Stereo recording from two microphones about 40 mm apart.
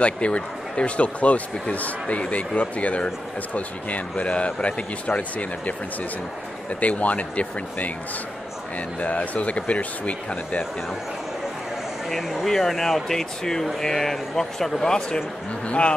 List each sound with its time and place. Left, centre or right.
0.0 s speech: left
12.1 s speech: centre
12.4 s a man's voice: centre; by 15.9 s left